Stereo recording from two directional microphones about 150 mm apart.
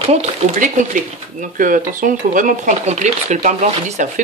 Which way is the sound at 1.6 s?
65° right (ahead or behind).